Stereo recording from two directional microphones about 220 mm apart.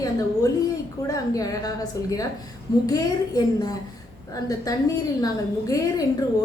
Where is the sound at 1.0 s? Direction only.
15° left (ahead or behind).